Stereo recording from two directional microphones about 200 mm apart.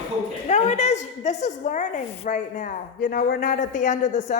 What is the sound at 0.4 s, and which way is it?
A woman's voice, 35° left (ahead or behind).